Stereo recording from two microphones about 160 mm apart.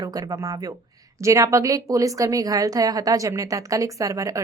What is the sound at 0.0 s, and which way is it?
A woman's voice, 25° right (ahead or behind).